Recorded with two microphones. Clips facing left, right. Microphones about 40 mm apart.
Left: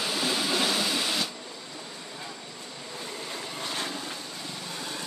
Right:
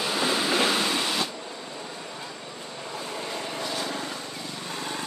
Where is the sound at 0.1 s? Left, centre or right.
Right.